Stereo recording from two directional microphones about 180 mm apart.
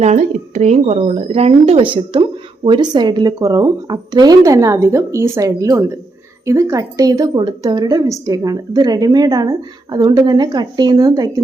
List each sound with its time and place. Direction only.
0.0 s speech: 40° right (ahead or behind); by 11.4 s 20° right (ahead or behind)